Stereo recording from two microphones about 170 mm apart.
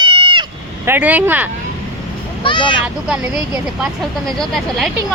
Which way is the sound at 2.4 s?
30° left (ahead or behind).